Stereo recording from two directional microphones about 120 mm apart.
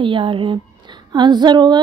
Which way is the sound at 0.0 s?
45° right (ahead or behind).